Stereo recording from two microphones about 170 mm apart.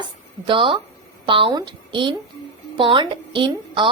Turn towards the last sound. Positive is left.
turn(degrees=-30)  # may be behind; listen again after turning